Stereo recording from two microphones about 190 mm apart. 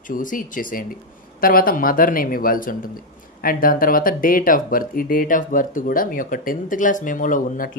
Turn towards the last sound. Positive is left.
turn(degrees=45)  # may be behind; listen again after turning